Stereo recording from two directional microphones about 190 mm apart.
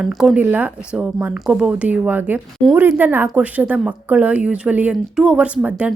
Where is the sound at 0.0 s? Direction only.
Centre (ahead or behind).